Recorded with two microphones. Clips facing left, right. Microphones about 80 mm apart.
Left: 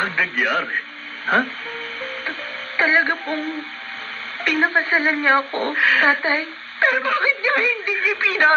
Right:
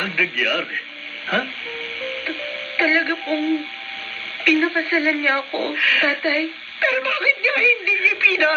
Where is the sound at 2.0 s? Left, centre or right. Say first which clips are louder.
Right 3 dB; left.